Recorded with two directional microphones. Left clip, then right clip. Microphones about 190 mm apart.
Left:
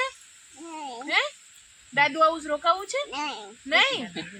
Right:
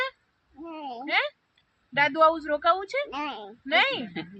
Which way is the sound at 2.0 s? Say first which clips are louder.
Even; 70° left (ahead or behind).